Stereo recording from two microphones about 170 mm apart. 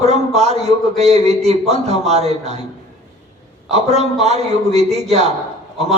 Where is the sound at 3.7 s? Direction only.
40° right (ahead or behind).